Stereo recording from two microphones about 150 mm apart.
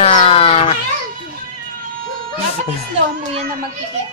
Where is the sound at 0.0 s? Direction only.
45° left (ahead or behind).